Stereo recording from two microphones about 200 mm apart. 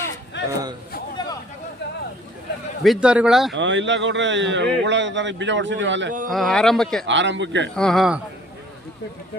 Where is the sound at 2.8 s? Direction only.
5° right (ahead or behind).